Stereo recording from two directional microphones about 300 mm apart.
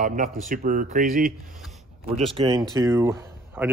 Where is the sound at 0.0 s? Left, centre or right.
Right.